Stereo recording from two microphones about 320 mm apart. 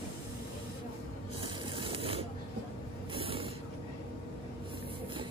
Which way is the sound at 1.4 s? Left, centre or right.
Centre.